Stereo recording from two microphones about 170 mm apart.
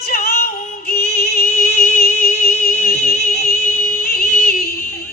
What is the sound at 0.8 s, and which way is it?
Music, 65° left (ahead or behind).